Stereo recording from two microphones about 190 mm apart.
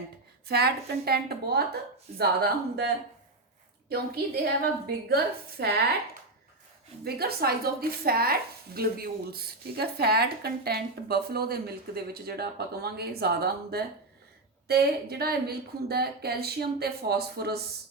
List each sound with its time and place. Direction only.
0.4 s speech: 55° right (ahead or behind)
7.0 s speech: 55° right (ahead or behind)